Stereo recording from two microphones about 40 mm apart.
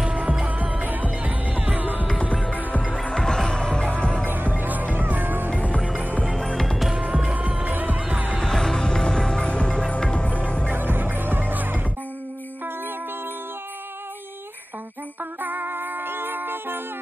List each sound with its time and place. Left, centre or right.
0.0 s music: centre
0.5 s music: right
3.2 s music: centre
4.2 s music: right
5.9 s music: right
6.3 s music: centre
7.0 s music: centre
7.3 s music: right
8.4 s music: centre
9.5 s music: left
10.7 s music: right
15.4 s music: right